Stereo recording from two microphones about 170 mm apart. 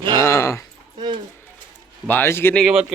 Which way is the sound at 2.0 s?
10° left (ahead or behind).